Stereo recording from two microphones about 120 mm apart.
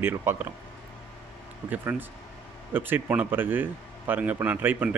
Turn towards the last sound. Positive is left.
turn(degrees=-15)  # may be behind; listen again after turning